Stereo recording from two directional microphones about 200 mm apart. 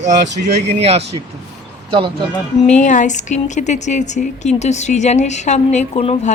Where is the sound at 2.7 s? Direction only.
40° left (ahead or behind).